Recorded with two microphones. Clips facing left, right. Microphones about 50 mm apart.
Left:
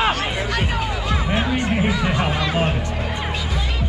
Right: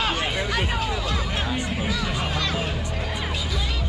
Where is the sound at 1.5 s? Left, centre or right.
Left.